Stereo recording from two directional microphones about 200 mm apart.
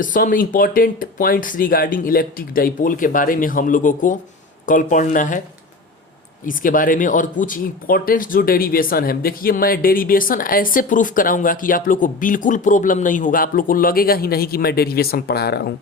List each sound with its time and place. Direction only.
0.0 s speech: 40° left (ahead or behind)
6.4 s speech: 40° left (ahead or behind)